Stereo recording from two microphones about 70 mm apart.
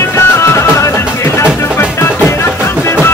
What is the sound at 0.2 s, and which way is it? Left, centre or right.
Music, left.